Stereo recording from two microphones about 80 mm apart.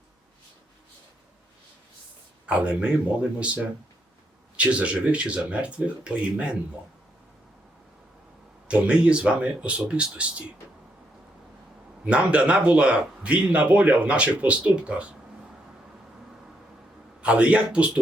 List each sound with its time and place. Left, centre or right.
2.5 s a man's voice: centre
4.5 s a man's voice: centre
8.6 s a man's voice: centre
12.0 s a man's voice: centre
17.2 s a man's voice: centre